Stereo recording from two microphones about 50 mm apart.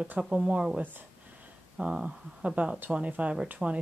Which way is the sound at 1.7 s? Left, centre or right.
Centre.